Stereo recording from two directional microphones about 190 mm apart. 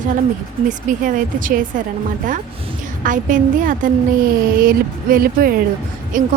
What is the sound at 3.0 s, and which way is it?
Speech, 45° right (ahead or behind).